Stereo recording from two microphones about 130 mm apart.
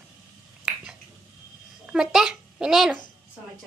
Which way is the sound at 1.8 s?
5° right (ahead or behind).